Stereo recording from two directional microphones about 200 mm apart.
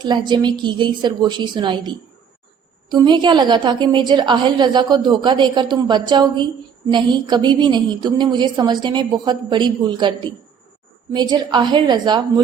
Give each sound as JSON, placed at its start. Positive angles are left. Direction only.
{"t": 0.0, "sound": "a woman's voice", "side_deg": -20}
{"t": 2.9, "sound": "a woman's voice", "side_deg": -20}
{"t": 11.1, "sound": "a woman's voice", "side_deg": -20}